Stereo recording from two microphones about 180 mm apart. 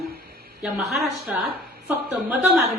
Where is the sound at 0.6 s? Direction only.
Centre (ahead or behind).